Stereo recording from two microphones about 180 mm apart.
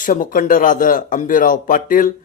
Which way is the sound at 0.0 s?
50° left (ahead or behind).